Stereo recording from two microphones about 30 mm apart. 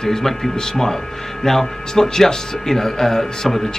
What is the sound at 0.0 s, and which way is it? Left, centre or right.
Speech, centre.